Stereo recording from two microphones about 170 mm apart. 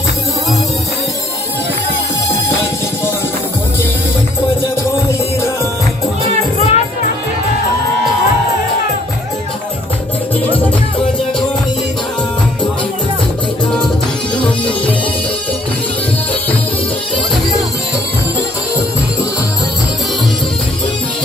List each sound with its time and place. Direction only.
6.6 s music: 40° left (ahead or behind)
14.3 s music: 5° left (ahead or behind)